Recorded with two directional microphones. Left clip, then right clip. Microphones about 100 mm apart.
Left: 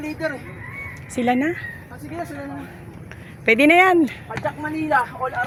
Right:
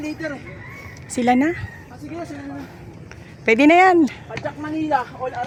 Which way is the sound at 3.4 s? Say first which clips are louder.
Right 1 dB; 50° right (ahead or behind).